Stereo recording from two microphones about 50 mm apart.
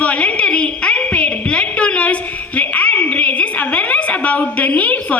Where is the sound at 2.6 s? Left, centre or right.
Left.